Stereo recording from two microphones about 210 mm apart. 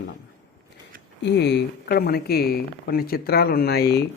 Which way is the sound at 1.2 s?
55° left (ahead or behind).